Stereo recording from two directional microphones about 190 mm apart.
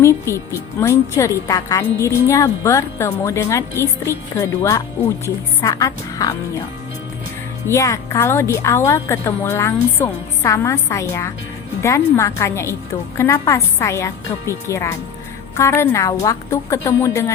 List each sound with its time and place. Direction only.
0.0 s a woman's voice: 15° left (ahead or behind)
7.7 s a woman's voice: 15° left (ahead or behind)